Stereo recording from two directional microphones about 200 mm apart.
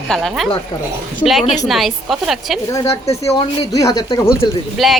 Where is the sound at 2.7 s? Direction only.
15° left (ahead or behind).